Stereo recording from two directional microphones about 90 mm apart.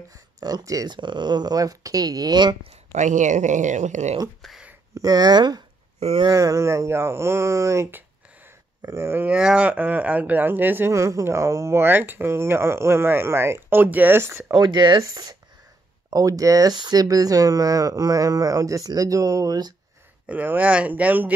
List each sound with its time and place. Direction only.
0.1 s speech: 45° right (ahead or behind)
0.8 s speech: 55° right (ahead or behind)
2.9 s speech: 30° left (ahead or behind)
4.4 s a sound: centre (ahead or behind)
4.9 s speech: 45° right (ahead or behind)
6.2 s speech: 35° right (ahead or behind); by 10.9 s 20° right (ahead or behind)
10.9 s speech: 35° right (ahead or behind)
14.5 s speech: 55° right (ahead or behind)
15.0 s speech: 35° right (ahead or behind)
20.2 s speech: 20° right (ahead or behind)